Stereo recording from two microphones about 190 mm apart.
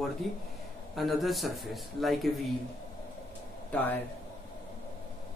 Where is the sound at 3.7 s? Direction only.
10° left (ahead or behind).